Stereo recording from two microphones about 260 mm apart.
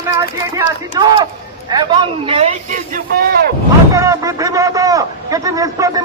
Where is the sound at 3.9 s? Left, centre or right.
Centre.